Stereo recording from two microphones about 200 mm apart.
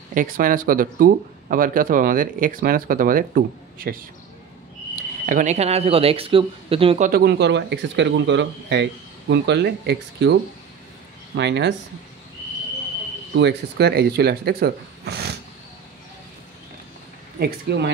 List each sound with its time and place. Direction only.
0.1 s speech: 45° right (ahead or behind)
5.2 s speech: 40° right (ahead or behind)
7.1 s speech: 55° right (ahead or behind)
11.3 s speech: 60° right (ahead or behind)
13.3 s speech: 60° right (ahead or behind)
17.4 s speech: 55° right (ahead or behind)